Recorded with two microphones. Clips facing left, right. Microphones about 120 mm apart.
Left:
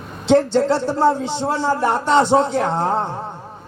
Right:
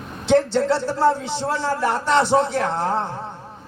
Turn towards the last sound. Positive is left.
turn(degrees=25)  # may be behind; listen again after turning